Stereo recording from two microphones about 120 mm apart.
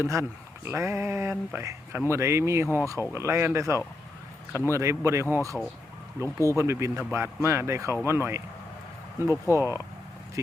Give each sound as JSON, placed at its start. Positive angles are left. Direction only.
{"t": 0.0, "sound": "speech", "side_deg": -25}
{"t": 2.6, "sound": "speech", "side_deg": 20}
{"t": 3.2, "sound": "speech", "side_deg": -20}
{"t": 6.2, "sound": "speech", "side_deg": 25}
{"t": 6.6, "sound": "speech", "side_deg": -25}
{"t": 9.2, "sound": "speech", "side_deg": 25}
{"t": 10.4, "sound": "speech", "side_deg": -25}